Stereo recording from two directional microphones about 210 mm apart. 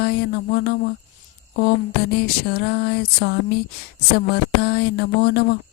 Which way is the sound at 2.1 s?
50° left (ahead or behind).